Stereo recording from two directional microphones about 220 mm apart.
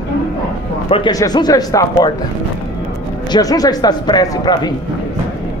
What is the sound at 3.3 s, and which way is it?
A man's voice, 15° left (ahead or behind).